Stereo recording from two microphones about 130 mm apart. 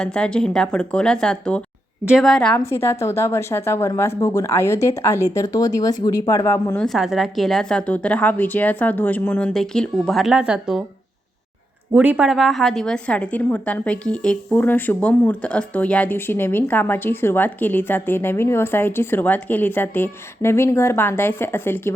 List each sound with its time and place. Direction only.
0.0 s a woman's voice: 5° left (ahead or behind)
2.0 s speech: 5° right (ahead or behind)
2.3 s a woman's voice: 5° left (ahead or behind)
2.6 s speech: 20° left (ahead or behind)
6.7 s a woman's voice: centre (ahead or behind)
11.9 s a woman's voice: 10° right (ahead or behind); by 21.9 s 15° left (ahead or behind)